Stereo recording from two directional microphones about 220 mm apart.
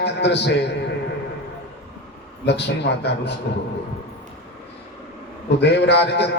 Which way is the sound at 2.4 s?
50° left (ahead or behind).